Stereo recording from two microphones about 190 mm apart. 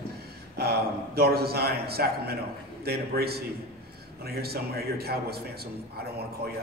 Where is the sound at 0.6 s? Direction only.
55° right (ahead or behind).